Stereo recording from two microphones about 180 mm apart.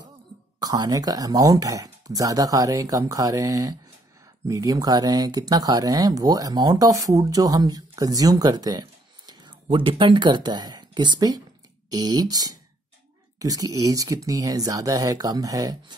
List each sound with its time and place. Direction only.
0.6 s speech: 20° right (ahead or behind)